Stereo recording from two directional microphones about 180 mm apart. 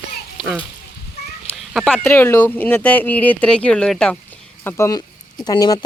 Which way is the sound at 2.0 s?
15° left (ahead or behind).